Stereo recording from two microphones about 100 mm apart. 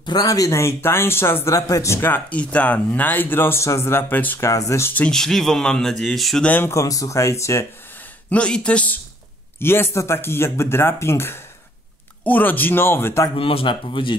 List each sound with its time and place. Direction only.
0.0 s speech: 40° left (ahead or behind)
2.1 s speech: 15° left (ahead or behind)
4.5 s speech: 30° left (ahead or behind)
4.9 s speech: 10° left (ahead or behind)
6.4 s speech: 15° left (ahead or behind)
6.7 s speech: 35° left (ahead or behind)
8.3 s speech: 10° left (ahead or behind); by 13.3 s 25° left (ahead or behind)
13.4 s speech: 65° left (ahead or behind)